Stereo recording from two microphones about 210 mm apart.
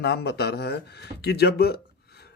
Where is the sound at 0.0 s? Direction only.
50° left (ahead or behind).